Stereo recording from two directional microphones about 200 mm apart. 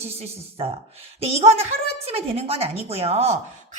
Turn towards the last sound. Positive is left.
turn(degrees=-30)  # may be behind; listen again after turning